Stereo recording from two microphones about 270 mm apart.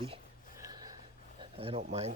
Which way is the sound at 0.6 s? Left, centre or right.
Centre.